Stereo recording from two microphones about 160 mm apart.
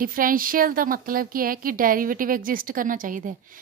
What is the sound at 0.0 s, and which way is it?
A woman's voice, 60° right (ahead or behind).